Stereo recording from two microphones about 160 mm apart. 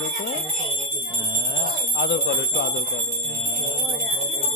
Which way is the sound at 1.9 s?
90° left.